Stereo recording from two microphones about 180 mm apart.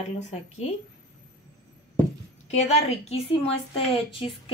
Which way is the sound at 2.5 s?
35° left (ahead or behind).